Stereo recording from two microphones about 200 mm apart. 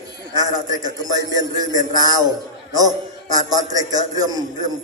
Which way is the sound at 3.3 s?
20° right (ahead or behind).